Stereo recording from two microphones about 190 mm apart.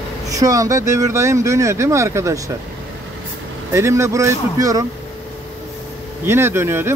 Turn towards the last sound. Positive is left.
turn(degrees=-15)  # may be behind; listen again after turning